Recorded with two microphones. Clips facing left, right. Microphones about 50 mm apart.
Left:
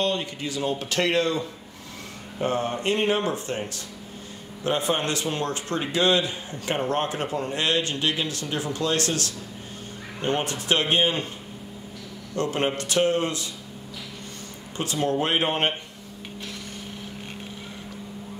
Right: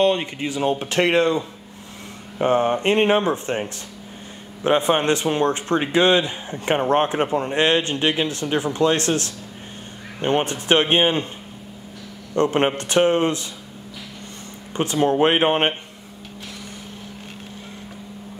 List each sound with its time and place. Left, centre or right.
0.0 s a man's voice: right
12.4 s speech: right
14.8 s speech: right